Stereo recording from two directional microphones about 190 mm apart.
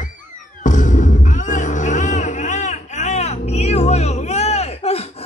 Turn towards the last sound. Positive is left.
turn(degrees=35)  # may be behind; listen again after turning